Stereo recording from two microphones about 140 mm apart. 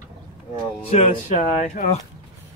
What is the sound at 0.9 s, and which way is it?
Speech, 50° left (ahead or behind).